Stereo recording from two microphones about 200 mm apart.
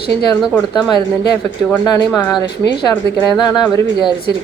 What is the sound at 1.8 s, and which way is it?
A woman's voice, 20° left (ahead or behind).